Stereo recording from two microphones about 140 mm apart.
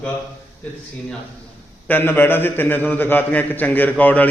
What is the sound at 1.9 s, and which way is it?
A man's voice, 15° left (ahead or behind).